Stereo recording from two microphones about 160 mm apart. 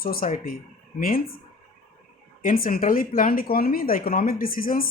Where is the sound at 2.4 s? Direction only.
60° left (ahead or behind).